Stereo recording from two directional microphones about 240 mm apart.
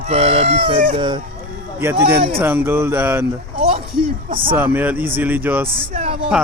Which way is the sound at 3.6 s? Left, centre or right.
Right.